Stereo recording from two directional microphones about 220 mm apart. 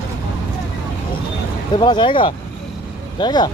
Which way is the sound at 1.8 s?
20° left (ahead or behind).